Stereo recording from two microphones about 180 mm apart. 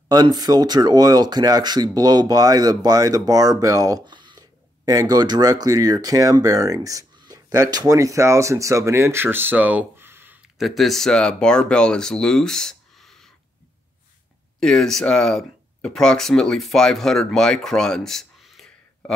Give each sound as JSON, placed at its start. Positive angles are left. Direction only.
{"t": 0.1, "sound": "speech", "side_deg": -20}
{"t": 14.6, "sound": "speech", "side_deg": 0}